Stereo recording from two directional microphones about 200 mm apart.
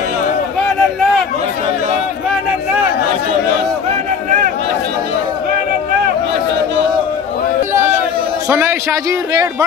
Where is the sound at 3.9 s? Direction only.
40° right (ahead or behind).